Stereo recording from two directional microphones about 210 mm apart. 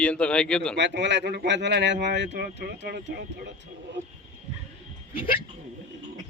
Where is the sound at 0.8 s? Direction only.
55° right (ahead or behind).